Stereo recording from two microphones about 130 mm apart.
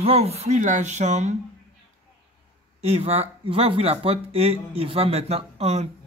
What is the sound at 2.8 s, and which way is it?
Speech, 50° right (ahead or behind).